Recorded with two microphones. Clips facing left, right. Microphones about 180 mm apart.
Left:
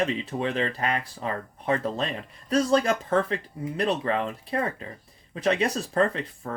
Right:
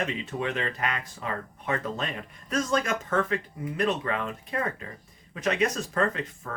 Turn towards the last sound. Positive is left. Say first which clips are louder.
# left 3 dB
turn(degrees=30)  # may be behind; listen again after turning